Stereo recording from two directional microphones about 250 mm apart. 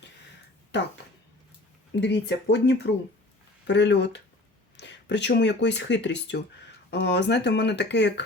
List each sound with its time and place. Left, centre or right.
0.7 s speech: left
2.0 s speech: left